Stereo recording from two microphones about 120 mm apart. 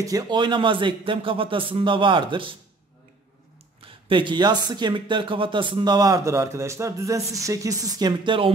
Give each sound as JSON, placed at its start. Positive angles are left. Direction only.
{"t": 0.0, "sound": "speech", "side_deg": -35}
{"t": 3.8, "sound": "speech", "side_deg": -45}